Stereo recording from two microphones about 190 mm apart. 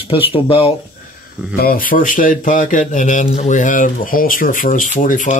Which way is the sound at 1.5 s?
50° left (ahead or behind).